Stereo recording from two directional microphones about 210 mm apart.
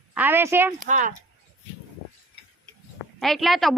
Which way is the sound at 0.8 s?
35° right (ahead or behind).